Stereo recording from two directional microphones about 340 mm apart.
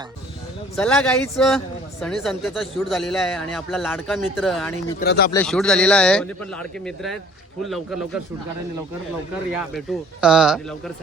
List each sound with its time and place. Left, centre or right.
0.8 s a man's voice: centre
4.9 s speech: left
5.3 s a man's voice: centre
9.5 s a man's voice: centre